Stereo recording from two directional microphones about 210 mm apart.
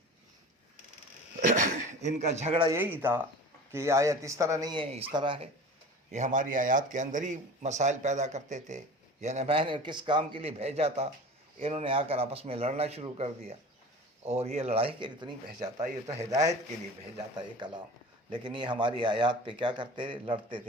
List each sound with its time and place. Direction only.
1.9 s a man's voice: 35° right (ahead or behind)
2.6 s a man's voice: 10° right (ahead or behind)
6.1 s a man's voice: 35° right (ahead or behind)
17.3 s speech: 20° right (ahead or behind)